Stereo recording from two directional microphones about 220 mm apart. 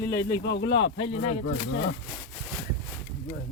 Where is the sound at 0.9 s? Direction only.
25° left (ahead or behind).